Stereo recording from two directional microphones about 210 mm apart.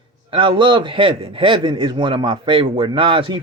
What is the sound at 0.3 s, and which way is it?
A man's voice, 25° right (ahead or behind).